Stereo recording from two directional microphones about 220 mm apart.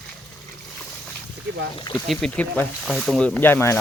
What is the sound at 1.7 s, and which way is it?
Speech, 20° left (ahead or behind).